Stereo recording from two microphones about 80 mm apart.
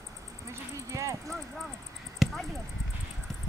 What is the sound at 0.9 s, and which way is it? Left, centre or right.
Speech, right.